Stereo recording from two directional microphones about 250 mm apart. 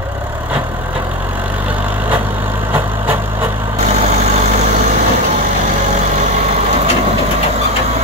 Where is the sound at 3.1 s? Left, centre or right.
Centre.